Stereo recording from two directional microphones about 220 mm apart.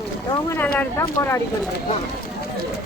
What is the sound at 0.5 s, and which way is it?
Speech, 10° left (ahead or behind).